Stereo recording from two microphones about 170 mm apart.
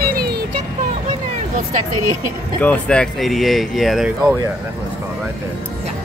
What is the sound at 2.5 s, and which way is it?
Speech, 5° left (ahead or behind).